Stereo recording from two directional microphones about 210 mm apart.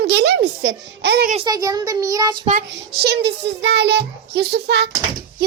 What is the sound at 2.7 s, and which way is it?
A child's voice, 50° right (ahead or behind).